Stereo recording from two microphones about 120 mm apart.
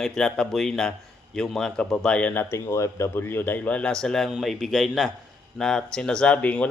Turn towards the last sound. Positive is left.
turn(degrees=10)  # may be behind; listen again after turning